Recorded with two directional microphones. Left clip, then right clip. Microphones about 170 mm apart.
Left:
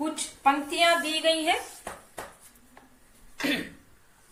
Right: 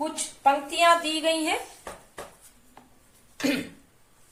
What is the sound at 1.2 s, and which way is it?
Speech, 40° right (ahead or behind).